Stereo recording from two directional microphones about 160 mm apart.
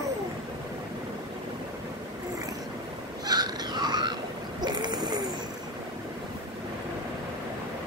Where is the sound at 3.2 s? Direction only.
25° right (ahead or behind).